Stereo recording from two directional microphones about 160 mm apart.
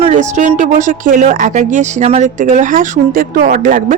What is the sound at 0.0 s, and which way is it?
Speech, 50° right (ahead or behind).